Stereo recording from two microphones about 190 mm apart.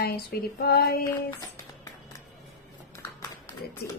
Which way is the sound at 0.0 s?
55° left (ahead or behind).